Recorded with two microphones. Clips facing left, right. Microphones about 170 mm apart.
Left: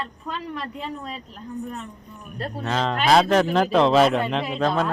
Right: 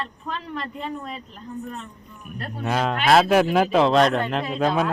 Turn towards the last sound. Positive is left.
turn(degrees=-5)  # may be behind; listen again after turning